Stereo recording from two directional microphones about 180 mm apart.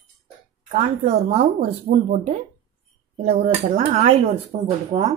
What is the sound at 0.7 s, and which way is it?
Speech, 40° right (ahead or behind).